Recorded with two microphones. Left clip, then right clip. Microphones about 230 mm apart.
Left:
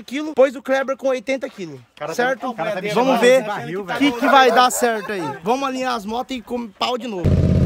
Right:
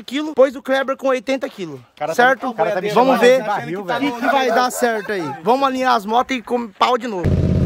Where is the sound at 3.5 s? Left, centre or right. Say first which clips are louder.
Right 4 dB; right.